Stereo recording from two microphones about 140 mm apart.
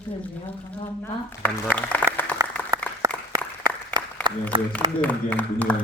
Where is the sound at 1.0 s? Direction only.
10° left (ahead or behind).